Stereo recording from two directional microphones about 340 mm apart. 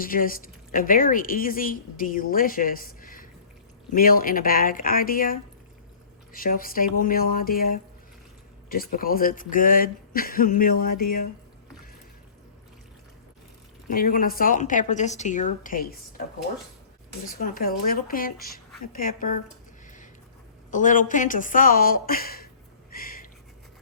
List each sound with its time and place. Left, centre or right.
0.0 s speech: left
13.9 s speech: left
17.2 s speech: left
20.7 s speech: left
22.9 s a sound: left